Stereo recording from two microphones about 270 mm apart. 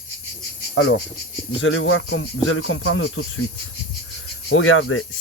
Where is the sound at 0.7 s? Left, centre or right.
Left.